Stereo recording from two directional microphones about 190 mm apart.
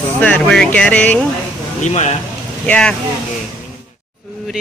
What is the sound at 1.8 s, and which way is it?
Speech, 40° left (ahead or behind).